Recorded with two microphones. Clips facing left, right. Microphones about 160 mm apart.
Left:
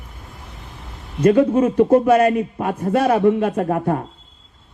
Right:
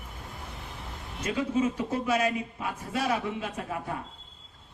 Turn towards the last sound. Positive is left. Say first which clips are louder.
# left 14 dB
turn(degrees=55)  # may be behind; listen again after turning